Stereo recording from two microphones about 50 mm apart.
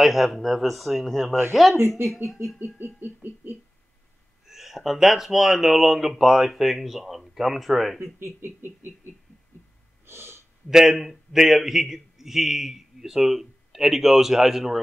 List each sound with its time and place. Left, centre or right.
0.0 s a man's voice: centre
1.8 s a sound: right
4.5 s a man's voice: centre
8.0 s a sound: right
10.0 s snort: right
10.7 s a man's voice: centre